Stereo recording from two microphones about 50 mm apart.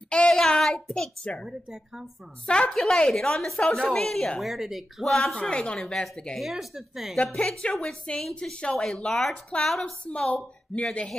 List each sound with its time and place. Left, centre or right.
0.3 s child singing: centre
2.4 s a woman's voice: centre
4.4 s speech: centre
5.0 s a woman's voice: centre
5.5 s a woman's voice: centre
6.3 s speech: centre
7.3 s a woman's voice: centre
8.4 s a woman's voice: centre
8.7 s a woman's voice: centre
10.0 s a woman's voice: left